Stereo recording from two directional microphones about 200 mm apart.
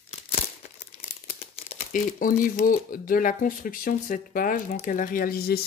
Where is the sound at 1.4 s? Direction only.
30° left (ahead or behind).